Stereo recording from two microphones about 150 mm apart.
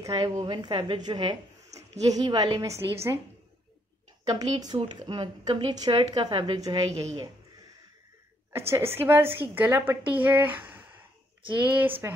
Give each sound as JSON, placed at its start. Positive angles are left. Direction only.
{"t": 0.0, "sound": "a woman's voice", "side_deg": -25}
{"t": 4.3, "sound": "a woman's voice", "side_deg": -25}
{"t": 8.5, "sound": "speech", "side_deg": -15}